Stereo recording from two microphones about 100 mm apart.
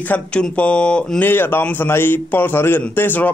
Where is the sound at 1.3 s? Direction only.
20° left (ahead or behind).